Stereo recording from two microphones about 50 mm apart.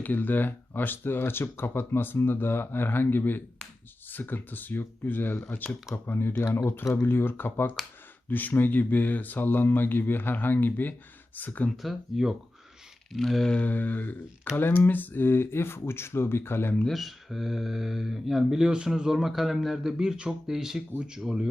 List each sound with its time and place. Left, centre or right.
0.0 s speech: left
8.3 s speech: left
11.8 s speech: centre
13.5 s speech: left
16.9 s speech: centre